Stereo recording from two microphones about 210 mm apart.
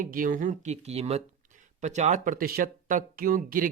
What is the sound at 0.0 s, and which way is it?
Speech, 40° right (ahead or behind).